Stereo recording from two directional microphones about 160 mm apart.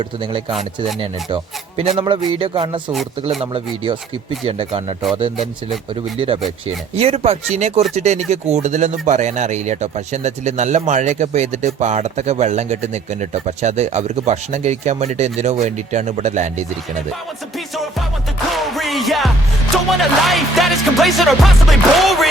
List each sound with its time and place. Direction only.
0.0 s a man's voice: 30° right (ahead or behind)
6.1 s a man's voice: 35° right (ahead or behind)
18.5 s music: centre (ahead or behind)